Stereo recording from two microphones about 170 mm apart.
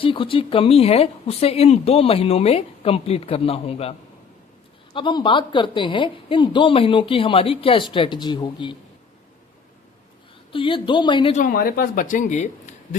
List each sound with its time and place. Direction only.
0.0 s speech: 30° left (ahead or behind)
4.9 s speech: 30° left (ahead or behind)
10.5 s speech: 30° left (ahead or behind)
11.3 s speech: 55° left (ahead or behind)